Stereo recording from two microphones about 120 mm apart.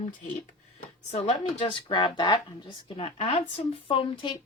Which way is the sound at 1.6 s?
45° left (ahead or behind).